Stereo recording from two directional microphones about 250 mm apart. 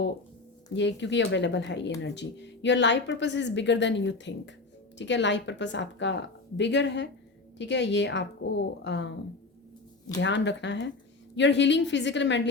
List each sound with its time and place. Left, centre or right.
0.7 s speech: left
10.2 s speech: left